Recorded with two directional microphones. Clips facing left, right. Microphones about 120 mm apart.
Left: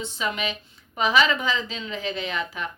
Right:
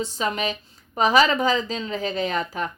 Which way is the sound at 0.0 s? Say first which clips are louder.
Right 3 dB; 40° right (ahead or behind).